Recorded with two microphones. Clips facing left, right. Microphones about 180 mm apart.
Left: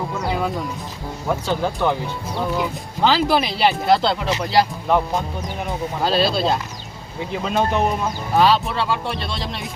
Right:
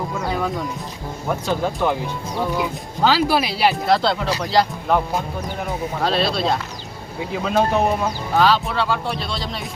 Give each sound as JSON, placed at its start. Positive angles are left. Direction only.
{"t": 0.3, "sound": "music", "side_deg": 5}
{"t": 1.6, "sound": "speech", "side_deg": -10}